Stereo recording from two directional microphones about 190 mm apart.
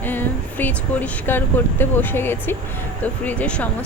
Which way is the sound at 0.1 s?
10° left (ahead or behind).